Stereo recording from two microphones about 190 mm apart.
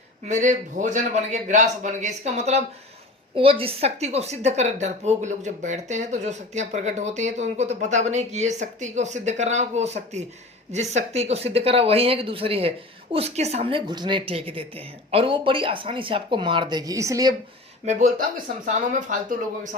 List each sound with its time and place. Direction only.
0.3 s a woman's voice: 40° right (ahead or behind); by 17.3 s 20° right (ahead or behind)
17.8 s a woman's voice: 40° right (ahead or behind)